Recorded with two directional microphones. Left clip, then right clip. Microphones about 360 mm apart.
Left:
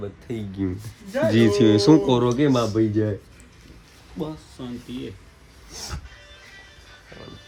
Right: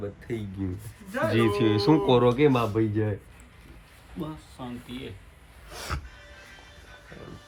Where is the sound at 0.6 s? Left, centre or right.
Left.